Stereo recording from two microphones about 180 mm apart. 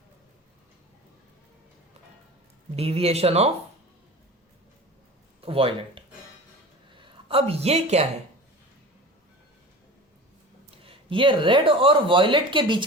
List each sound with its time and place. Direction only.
2.7 s speech: 35° right (ahead or behind)
5.4 s speech: 30° right (ahead or behind)
10.8 s speech: 30° right (ahead or behind)